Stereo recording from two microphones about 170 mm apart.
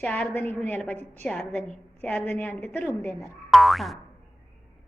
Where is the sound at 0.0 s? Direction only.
10° left (ahead or behind).